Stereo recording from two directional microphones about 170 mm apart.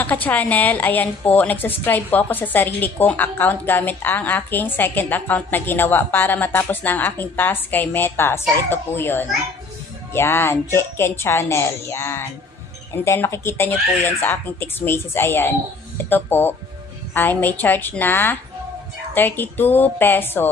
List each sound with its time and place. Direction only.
0.0 s a woman's voice: 10° left (ahead or behind)